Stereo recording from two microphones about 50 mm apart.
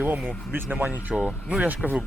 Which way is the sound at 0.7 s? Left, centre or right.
Right.